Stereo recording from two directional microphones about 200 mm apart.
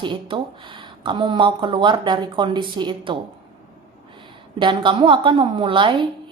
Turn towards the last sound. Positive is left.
turn(degrees=-25)  # may be behind; listen again after turning